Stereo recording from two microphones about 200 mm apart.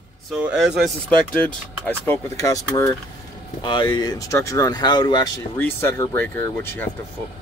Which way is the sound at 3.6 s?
25° left (ahead or behind).